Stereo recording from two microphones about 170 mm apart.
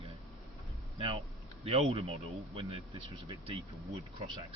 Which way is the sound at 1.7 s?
35° right (ahead or behind).